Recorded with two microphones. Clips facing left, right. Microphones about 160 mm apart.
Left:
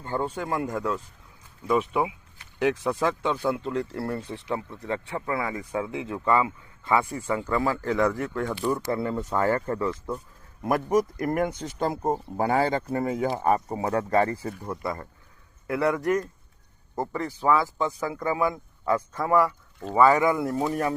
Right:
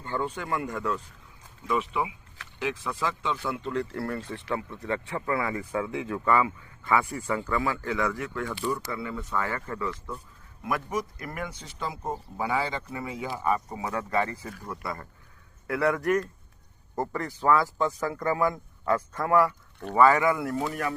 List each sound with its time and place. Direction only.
0.0 s speech: 40° left (ahead or behind)
0.3 s speech: 30° left (ahead or behind)
1.6 s speech: 45° left (ahead or behind)
3.3 s speech: 50° left (ahead or behind)
3.7 s speech: 30° left (ahead or behind)
5.0 s speech: 5° left (ahead or behind)
7.5 s speech: 35° left (ahead or behind)
10.6 s speech: 45° left (ahead or behind)
14.6 s speech: 25° left (ahead or behind)
16.9 s a man's voice: 5° left (ahead or behind); by 20.9 s 25° left (ahead or behind)